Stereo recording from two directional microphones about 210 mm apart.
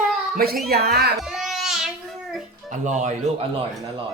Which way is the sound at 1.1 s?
Centre (ahead or behind).